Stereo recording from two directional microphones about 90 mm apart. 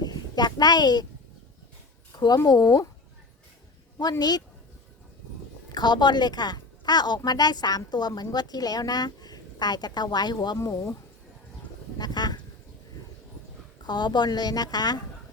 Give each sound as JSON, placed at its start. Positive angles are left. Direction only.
{"t": 0.0, "sound": "a child's voice", "side_deg": 50}
{"t": 2.1, "sound": "a woman's voice", "side_deg": 50}
{"t": 4.2, "sound": "a woman's voice", "side_deg": 50}
{"t": 5.7, "sound": "a woman's voice", "side_deg": 55}
{"t": 10.6, "sound": "speech", "side_deg": 35}
{"t": 11.9, "sound": "speech", "side_deg": 50}
{"t": 13.8, "sound": "a woman's voice", "side_deg": 55}